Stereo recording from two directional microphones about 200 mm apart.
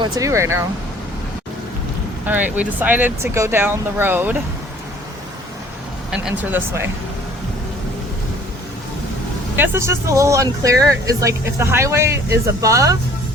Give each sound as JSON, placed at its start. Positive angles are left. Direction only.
{"t": 0.0, "sound": "speech", "side_deg": -15}
{"t": 2.2, "sound": "speech", "side_deg": -10}
{"t": 6.1, "sound": "speech", "side_deg": -5}
{"t": 9.6, "sound": "speech", "side_deg": -15}